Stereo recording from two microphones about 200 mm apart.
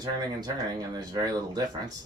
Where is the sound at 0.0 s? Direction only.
20° right (ahead or behind).